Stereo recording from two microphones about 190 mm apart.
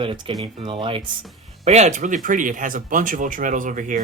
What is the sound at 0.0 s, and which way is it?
Speech, 25° right (ahead or behind).